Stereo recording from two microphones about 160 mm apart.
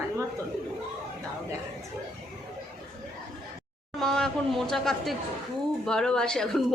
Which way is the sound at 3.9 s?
5° left (ahead or behind).